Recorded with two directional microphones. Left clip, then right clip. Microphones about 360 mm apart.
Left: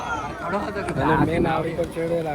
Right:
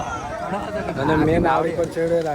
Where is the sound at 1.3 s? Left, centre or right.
Centre.